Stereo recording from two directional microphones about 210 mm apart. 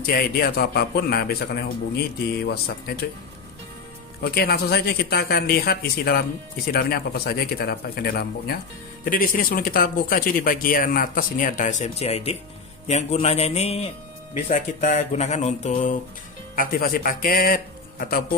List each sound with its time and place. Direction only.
0.0 s speech: 45° left (ahead or behind)
2.5 s speech: 45° left (ahead or behind)
4.2 s speech: 45° left (ahead or behind)